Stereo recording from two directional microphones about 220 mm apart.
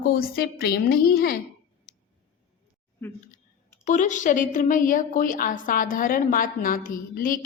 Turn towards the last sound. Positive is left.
turn(degrees=40)  # may be behind; listen again after turning